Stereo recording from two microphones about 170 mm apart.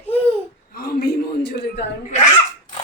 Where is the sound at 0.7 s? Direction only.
65° left (ahead or behind).